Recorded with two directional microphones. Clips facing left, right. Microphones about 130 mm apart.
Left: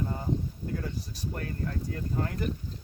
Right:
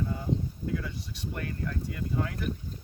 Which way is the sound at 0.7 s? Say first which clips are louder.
Right 1 dB; 45° left (ahead or behind).